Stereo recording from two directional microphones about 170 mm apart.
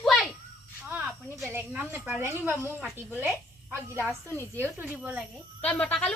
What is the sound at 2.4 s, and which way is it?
Speech, 10° right (ahead or behind).